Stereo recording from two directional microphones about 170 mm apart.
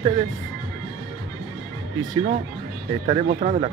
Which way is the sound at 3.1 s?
45° right (ahead or behind).